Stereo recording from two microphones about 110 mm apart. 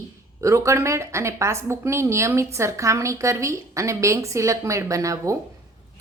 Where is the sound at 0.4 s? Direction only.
25° right (ahead or behind).